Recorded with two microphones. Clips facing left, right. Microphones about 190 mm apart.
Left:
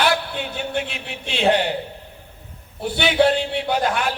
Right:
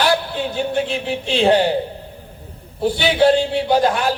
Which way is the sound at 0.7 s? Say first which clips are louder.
Right 7 dB; 35° right (ahead or behind).